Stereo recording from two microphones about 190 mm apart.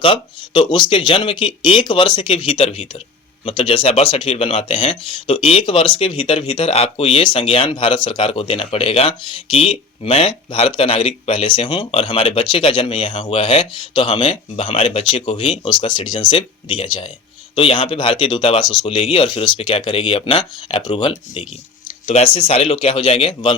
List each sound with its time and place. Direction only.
0.0 s speech: 25° left (ahead or behind)